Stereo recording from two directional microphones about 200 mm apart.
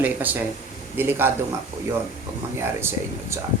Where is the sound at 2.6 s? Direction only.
15° right (ahead or behind).